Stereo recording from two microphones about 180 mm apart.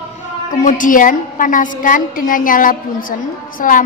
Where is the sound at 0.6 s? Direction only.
45° left (ahead or behind).